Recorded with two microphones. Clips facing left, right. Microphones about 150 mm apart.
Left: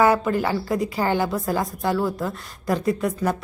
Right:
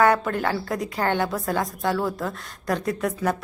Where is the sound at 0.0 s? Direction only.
5° left (ahead or behind).